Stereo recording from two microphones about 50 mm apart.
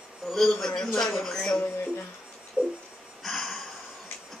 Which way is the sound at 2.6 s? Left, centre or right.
Right.